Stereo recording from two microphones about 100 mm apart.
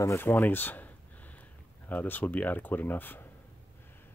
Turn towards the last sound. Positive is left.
turn(degrees=20)  # may be behind; listen again after turning